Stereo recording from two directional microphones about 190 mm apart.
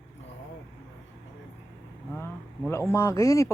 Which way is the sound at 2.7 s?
15° left (ahead or behind).